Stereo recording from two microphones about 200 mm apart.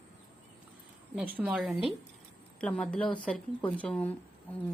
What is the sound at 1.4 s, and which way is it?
A woman's voice, 5° right (ahead or behind).